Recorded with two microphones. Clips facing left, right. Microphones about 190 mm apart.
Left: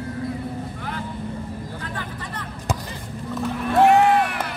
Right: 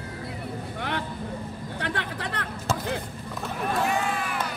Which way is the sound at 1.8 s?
75° right (ahead or behind).